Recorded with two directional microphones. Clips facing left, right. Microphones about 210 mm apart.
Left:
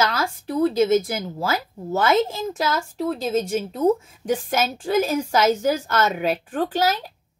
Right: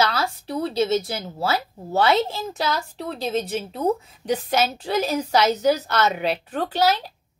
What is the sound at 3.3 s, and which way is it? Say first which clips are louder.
A woman's voice: left 3 dB; 45° left (ahead or behind).